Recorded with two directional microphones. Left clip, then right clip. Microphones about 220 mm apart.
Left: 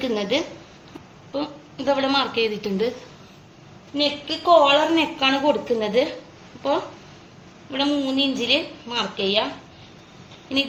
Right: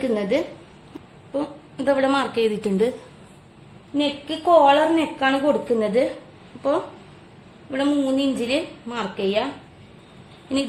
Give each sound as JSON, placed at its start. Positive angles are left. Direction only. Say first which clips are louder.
{"t": 0.0, "sound": "a woman's voice", "louder": "right 1 dB", "side_deg": -25}
{"t": 3.9, "sound": "a woman's voice", "louder": "left 1 dB", "side_deg": -30}
{"t": 7.7, "sound": "a woman's voice", "louder": "right 1 dB", "side_deg": -30}